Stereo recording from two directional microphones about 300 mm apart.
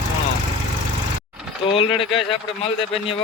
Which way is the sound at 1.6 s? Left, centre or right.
Centre.